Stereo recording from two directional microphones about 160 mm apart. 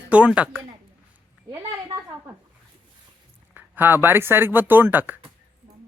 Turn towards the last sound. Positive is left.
turn(degrees=-10)  # may be behind; listen again after turning